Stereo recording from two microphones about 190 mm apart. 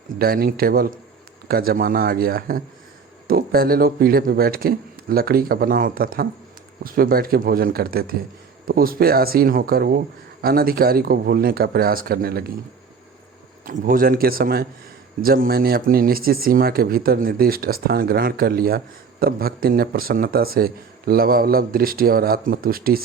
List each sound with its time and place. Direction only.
0.2 s speech: 50° right (ahead or behind)
13.7 s speech: 50° right (ahead or behind)